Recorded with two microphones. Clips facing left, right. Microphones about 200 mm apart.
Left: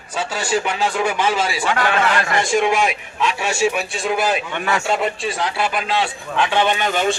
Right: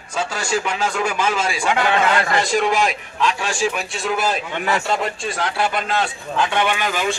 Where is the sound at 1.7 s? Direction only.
20° right (ahead or behind).